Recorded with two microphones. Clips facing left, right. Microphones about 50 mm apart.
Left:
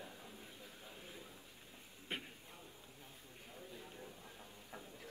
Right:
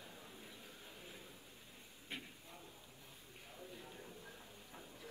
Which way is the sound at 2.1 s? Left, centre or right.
Left.